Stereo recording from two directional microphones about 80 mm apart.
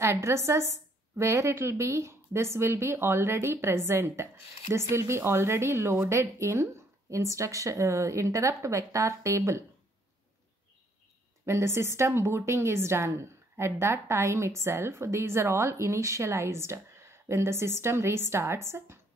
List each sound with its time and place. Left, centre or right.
0.0 s a woman's voice: right
11.4 s a woman's voice: right